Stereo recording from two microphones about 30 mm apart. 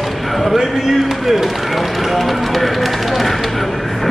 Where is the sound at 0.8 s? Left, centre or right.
Centre.